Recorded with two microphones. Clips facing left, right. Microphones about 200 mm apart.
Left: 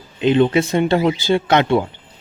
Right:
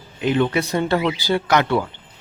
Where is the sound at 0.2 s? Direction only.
25° left (ahead or behind).